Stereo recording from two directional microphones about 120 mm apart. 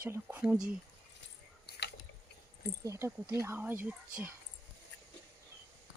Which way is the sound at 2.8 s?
25° right (ahead or behind).